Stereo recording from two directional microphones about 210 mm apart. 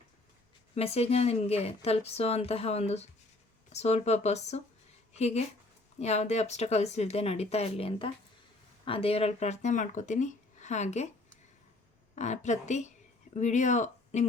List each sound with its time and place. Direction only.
0.8 s a woman's voice: 30° left (ahead or behind)
12.1 s speech: 35° left (ahead or behind)